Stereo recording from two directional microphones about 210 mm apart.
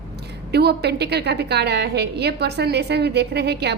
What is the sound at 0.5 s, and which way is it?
A woman's voice, 50° right (ahead or behind).